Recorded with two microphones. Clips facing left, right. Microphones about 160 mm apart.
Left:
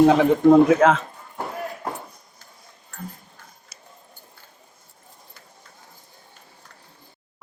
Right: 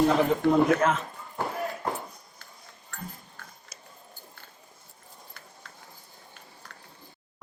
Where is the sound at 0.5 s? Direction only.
90° left.